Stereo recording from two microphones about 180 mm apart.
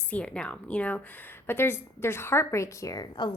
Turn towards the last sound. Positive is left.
turn(degrees=20)  # may be behind; listen again after turning